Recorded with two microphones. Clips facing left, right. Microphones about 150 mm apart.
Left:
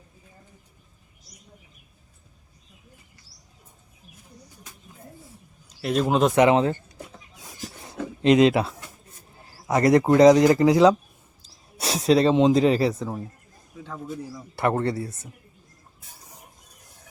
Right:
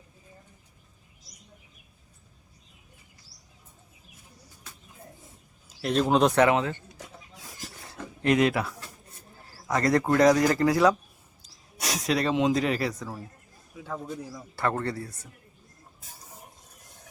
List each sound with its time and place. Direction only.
5.6 s speech: 5° left (ahead or behind)
6.3 s speech: 15° left (ahead or behind)
7.9 s a sound: 20° left (ahead or behind)
9.6 s speech: 20° left (ahead or behind)
14.5 s speech: 20° left (ahead or behind)